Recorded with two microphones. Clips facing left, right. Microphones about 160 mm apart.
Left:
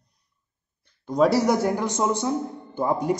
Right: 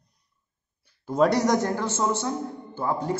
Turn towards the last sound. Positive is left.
turn(degrees=15)  # may be behind; listen again after turning